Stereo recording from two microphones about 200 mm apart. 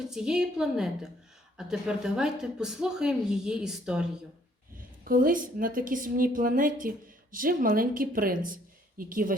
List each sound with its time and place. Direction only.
0.1 s speech: 5° right (ahead or behind)
5.0 s a woman's voice: 45° right (ahead or behind)